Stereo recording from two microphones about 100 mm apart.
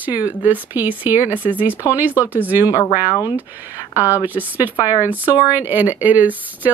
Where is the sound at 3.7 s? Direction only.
20° right (ahead or behind).